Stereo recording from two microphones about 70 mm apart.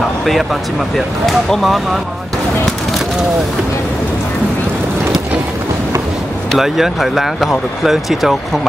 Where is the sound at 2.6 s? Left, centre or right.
Centre.